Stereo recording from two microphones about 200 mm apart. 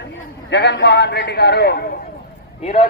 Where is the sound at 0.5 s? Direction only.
60° left (ahead or behind).